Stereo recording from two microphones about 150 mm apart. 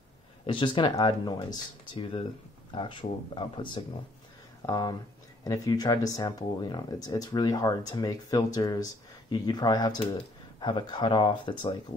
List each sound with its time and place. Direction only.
0.5 s speech: 30° left (ahead or behind)
4.6 s speech: 25° left (ahead or behind)